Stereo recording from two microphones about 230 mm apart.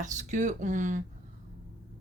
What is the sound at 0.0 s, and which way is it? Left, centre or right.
A woman's voice, right.